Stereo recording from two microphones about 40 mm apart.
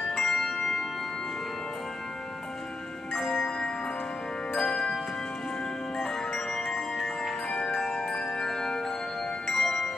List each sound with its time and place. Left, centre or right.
0.2 s bell: centre
3.1 s music: centre
3.3 s music: centre
5.9 s music: centre